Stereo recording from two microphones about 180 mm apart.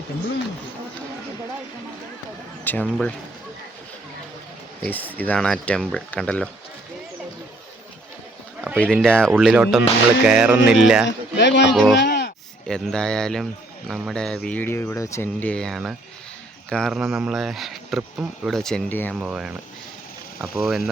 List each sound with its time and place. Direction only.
2.6 s speech: 5° left (ahead or behind)
4.8 s speech: 10° left (ahead or behind)
8.6 s speech: 5° left (ahead or behind)
11.3 s speech: 75° left (ahead or behind)
11.7 s speech: centre (ahead or behind)
11.9 s a sound: 70° left (ahead or behind)
12.6 s speech: 5° left (ahead or behind)
19.2 s speech: 5° right (ahead or behind)